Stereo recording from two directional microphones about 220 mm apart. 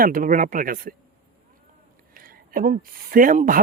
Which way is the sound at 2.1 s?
40° right (ahead or behind).